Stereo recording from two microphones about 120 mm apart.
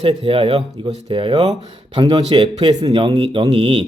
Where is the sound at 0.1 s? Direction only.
50° right (ahead or behind).